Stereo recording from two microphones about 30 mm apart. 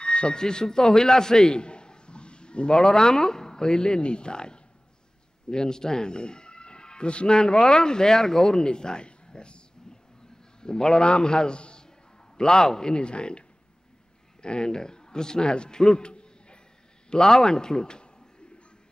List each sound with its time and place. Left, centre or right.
0.0 s speech: left
2.8 s speech: left
9.9 s a sound: left
10.6 s speech: left
12.4 s a man's voice: left
17.1 s a man's voice: centre